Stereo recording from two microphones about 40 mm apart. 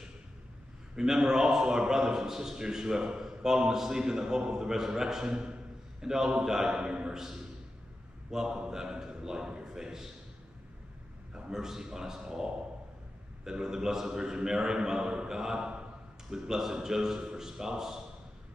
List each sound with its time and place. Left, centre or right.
0.9 s a man's voice: centre
8.3 s a man's voice: centre
11.3 s a man's voice: centre